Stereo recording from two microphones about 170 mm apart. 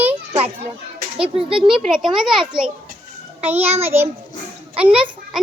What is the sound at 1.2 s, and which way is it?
Speech, 30° right (ahead or behind).